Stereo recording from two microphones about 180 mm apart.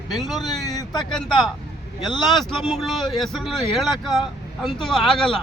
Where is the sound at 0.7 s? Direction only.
20° left (ahead or behind).